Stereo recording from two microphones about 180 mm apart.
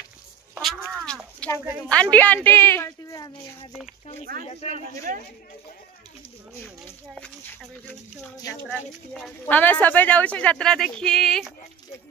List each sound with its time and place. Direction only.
0.6 s a sound: centre (ahead or behind)
1.9 s a woman's voice: 5° left (ahead or behind)
4.5 s speech: 35° left (ahead or behind)
4.7 s a man's voice: 45° right (ahead or behind)
8.6 s speech: 5° left (ahead or behind)